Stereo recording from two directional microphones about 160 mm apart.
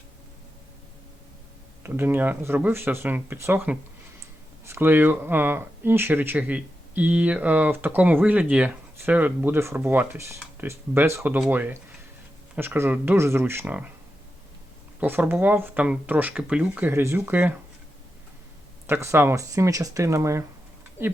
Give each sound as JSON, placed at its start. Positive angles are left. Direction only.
{"t": 1.8, "sound": "speech", "side_deg": -15}
{"t": 15.0, "sound": "speech", "side_deg": -10}
{"t": 18.9, "sound": "speech", "side_deg": -15}